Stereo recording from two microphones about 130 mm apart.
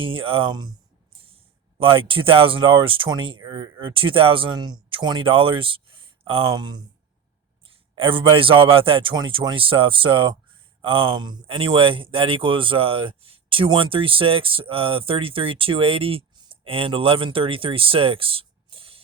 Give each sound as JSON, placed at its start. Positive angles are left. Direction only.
{"t": 0.0, "sound": "speech", "side_deg": -45}
{"t": 1.8, "sound": "speech", "side_deg": -45}
{"t": 7.9, "sound": "speech", "side_deg": -40}